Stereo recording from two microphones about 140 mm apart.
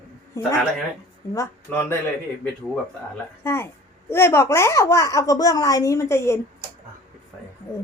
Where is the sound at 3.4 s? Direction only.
20° left (ahead or behind).